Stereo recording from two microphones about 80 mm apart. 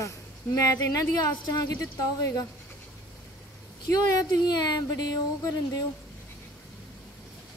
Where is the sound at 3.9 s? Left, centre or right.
Left.